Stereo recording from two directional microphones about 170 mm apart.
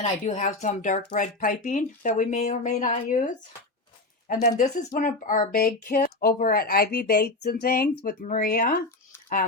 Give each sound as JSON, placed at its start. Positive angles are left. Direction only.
{"t": 0.3, "sound": "speech", "side_deg": 45}
{"t": 4.4, "sound": "speech", "side_deg": 50}